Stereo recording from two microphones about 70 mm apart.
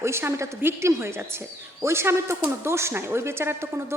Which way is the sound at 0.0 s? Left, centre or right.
Right.